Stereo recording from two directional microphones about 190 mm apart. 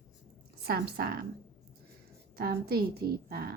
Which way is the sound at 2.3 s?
55° right (ahead or behind).